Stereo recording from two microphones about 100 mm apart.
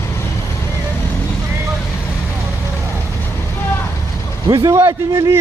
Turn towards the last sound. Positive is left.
turn(degrees=-30)  # may be behind; listen again after turning